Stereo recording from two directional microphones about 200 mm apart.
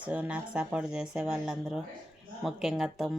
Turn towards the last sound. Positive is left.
turn(degrees=0)  # may be behind; listen again after turning